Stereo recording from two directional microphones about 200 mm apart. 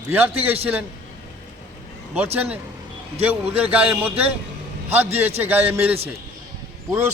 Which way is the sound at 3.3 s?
5° right (ahead or behind).